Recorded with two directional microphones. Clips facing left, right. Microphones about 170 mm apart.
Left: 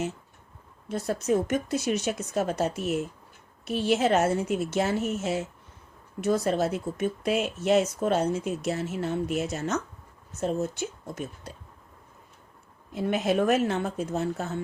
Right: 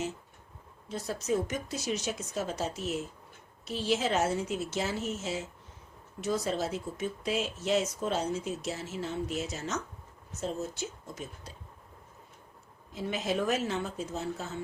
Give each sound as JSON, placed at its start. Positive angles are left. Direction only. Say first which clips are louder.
{"t": 0.9, "sound": "speech", "louder": "left 5 dB", "side_deg": 55}
{"t": 12.9, "sound": "speech", "louder": "left 7 dB", "side_deg": 60}